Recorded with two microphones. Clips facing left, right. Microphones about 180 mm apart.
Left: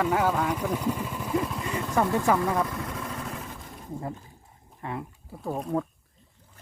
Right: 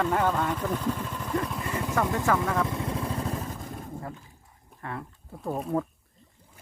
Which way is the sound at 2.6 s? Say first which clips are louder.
Right 3 dB; 25° right (ahead or behind).